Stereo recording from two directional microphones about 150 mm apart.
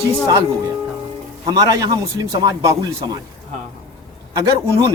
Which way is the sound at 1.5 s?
25° right (ahead or behind).